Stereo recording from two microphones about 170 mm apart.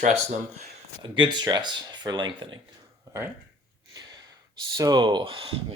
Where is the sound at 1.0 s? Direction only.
30° right (ahead or behind).